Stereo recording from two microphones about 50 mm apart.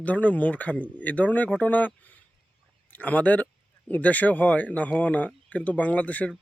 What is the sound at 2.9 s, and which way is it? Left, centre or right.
Speech, left.